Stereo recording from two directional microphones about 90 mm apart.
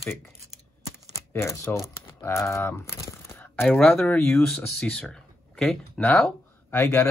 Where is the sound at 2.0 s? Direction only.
30° left (ahead or behind).